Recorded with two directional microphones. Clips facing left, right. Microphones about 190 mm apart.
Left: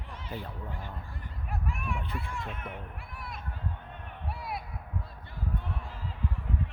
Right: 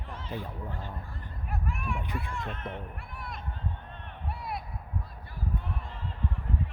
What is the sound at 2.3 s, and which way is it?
Speech, 5° left (ahead or behind).